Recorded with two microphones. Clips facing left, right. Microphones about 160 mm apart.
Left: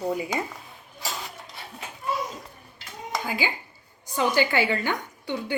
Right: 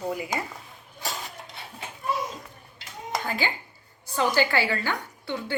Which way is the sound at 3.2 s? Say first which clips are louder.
Even; 10° left (ahead or behind).